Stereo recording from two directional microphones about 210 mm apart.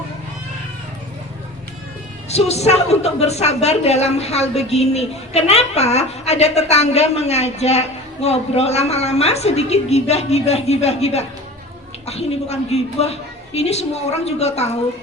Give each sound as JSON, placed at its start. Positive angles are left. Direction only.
{"t": 2.3, "sound": "a woman's voice", "side_deg": 30}